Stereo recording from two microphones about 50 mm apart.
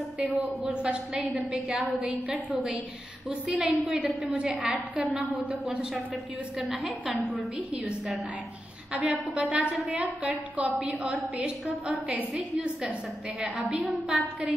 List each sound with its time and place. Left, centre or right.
0.2 s a woman's voice: right
3.5 s a woman's voice: right
4.6 s a woman's voice: right
6.6 s a woman's voice: centre
8.9 s a woman's voice: right
13.4 s a woman's voice: centre